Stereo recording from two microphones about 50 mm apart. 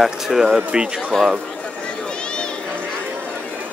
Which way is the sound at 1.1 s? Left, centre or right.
Centre.